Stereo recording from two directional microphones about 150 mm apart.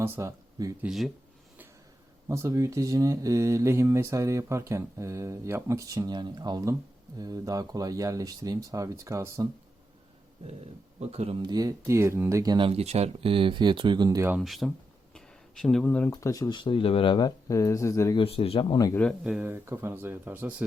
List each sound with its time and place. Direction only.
0.0 s speech: 15° right (ahead or behind)
0.9 s speech: centre (ahead or behind)
2.3 s speech: 20° right (ahead or behind)
11.1 s speech: 40° right (ahead or behind)
14.3 s speech: 5° right (ahead or behind); by 18.2 s 20° left (ahead or behind)
18.2 s speech: 40° left (ahead or behind)
19.2 s speech: 10° right (ahead or behind)